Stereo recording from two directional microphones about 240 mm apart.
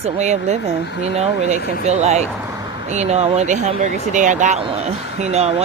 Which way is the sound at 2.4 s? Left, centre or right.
Centre.